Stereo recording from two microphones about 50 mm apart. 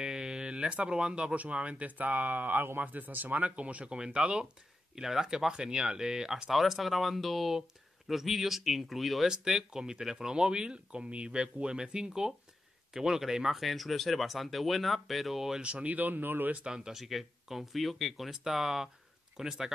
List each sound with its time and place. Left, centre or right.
0.0 s a sound: centre
1.3 s speech: right; by 6.5 s centre
6.5 s speech: centre
15.6 s speech: right
16.6 s speech: centre